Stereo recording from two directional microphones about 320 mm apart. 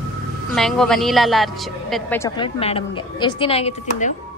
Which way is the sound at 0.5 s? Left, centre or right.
Centre.